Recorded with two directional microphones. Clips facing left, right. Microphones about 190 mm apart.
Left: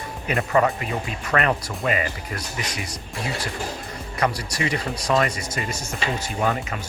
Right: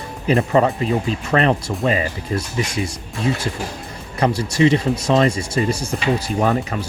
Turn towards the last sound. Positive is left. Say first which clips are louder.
# right 5 dB
turn(degrees=-35)  # may be behind; listen again after turning